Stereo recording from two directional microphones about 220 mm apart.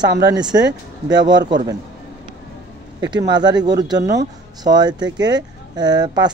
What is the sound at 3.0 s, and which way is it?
Speech, 20° right (ahead or behind).